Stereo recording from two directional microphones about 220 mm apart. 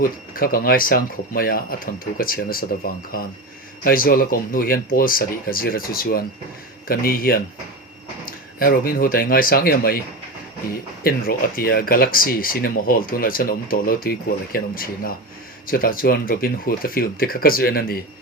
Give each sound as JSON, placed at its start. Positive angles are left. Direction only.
{"t": 0.0, "sound": "speech", "side_deg": 40}
{"t": 11.0, "sound": "speech", "side_deg": 40}